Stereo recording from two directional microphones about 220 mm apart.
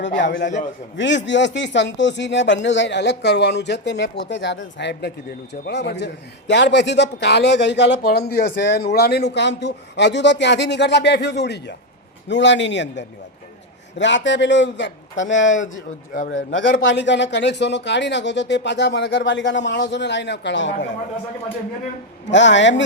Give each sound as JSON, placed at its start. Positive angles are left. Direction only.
{"t": 0.0, "sound": "a man's voice", "side_deg": 55}
{"t": 16.7, "sound": "speech", "side_deg": 55}
{"t": 22.3, "sound": "a man's voice", "side_deg": 55}